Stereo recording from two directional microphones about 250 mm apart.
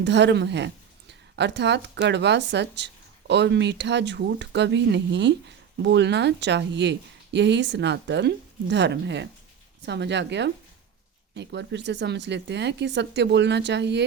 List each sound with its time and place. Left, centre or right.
0.0 s speech: right